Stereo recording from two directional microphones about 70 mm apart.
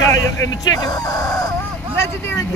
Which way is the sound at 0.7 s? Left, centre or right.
Left.